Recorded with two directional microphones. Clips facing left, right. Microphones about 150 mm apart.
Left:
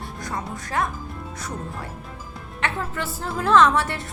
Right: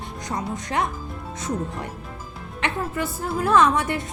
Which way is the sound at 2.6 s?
10° right (ahead or behind).